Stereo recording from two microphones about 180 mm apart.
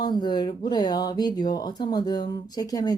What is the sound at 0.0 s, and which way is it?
Speech, 25° left (ahead or behind).